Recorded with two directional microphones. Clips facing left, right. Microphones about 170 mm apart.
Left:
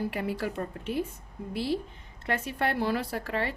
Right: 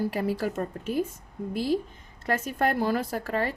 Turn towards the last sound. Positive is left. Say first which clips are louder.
# right 3 dB
turn(degrees=-45)  # may be behind; listen again after turning